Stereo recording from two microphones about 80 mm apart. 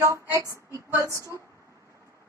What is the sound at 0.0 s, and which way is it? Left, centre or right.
Female singing, right.